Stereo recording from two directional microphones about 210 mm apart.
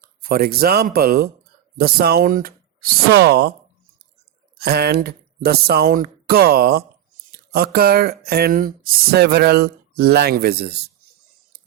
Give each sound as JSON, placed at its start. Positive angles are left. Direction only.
{"t": 0.0, "sound": "speech", "side_deg": -45}
{"t": 4.6, "sound": "speech", "side_deg": -50}